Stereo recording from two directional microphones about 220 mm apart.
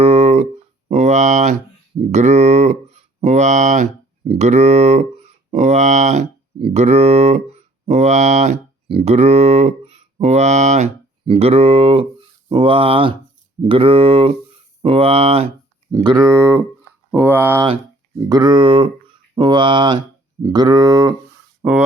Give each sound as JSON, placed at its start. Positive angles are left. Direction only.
{"t": 0.0, "sound": "a sound", "side_deg": -30}
{"t": 2.1, "sound": "speech", "side_deg": -30}
{"t": 16.0, "sound": "speech", "side_deg": -15}